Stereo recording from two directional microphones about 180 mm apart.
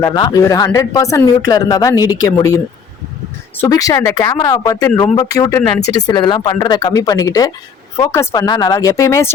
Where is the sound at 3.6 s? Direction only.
20° left (ahead or behind).